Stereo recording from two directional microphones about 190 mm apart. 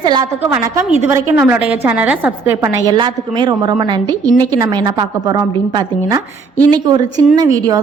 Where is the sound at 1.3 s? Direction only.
10° right (ahead or behind).